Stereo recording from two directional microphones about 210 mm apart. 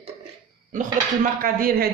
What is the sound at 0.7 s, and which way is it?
Speech, 40° right (ahead or behind).